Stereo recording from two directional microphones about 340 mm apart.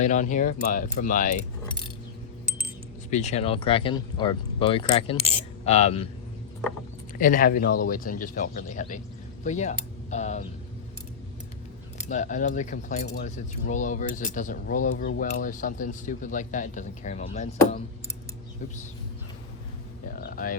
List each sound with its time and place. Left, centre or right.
0.0 s speech: left
3.1 s speech: centre
7.2 s speech: left
11.9 s speech: left
20.2 s a sound: left